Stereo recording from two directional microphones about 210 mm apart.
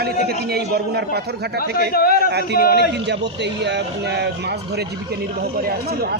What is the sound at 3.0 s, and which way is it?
Speech, 55° right (ahead or behind).